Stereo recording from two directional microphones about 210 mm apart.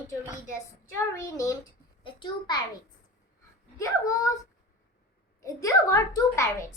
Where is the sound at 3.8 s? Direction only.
15° left (ahead or behind).